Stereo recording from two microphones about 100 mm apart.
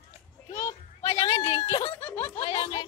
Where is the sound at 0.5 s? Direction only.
35° left (ahead or behind).